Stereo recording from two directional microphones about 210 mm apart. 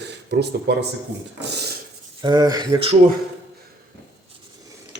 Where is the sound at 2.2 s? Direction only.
20° right (ahead or behind).